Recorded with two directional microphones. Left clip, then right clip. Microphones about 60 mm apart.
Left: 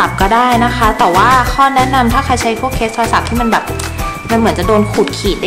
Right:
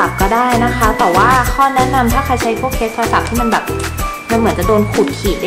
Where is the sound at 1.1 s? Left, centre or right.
Left.